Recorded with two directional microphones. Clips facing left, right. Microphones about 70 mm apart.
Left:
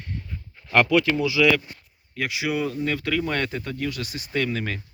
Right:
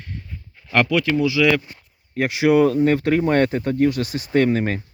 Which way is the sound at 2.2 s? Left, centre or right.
Right.